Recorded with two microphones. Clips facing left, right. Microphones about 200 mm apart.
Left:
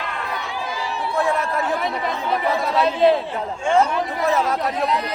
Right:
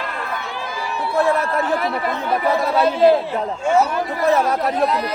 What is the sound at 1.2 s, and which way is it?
Speech, centre (ahead or behind).